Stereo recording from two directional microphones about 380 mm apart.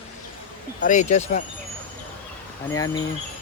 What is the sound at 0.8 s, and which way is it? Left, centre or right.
Speech, centre.